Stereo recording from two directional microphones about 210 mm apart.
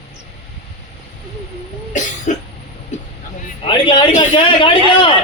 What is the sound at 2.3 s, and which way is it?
Cough, 35° left (ahead or behind).